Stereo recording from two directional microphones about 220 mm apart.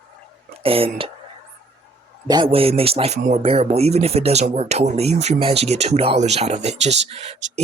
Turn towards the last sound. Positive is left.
turn(degrees=-30)  # may be behind; listen again after turning